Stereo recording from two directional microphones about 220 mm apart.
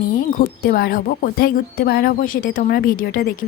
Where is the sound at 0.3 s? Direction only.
40° left (ahead or behind).